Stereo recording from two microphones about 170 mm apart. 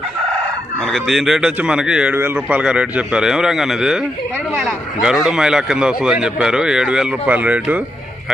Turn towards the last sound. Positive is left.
turn(degrees=-10)  # may be behind; listen again after turning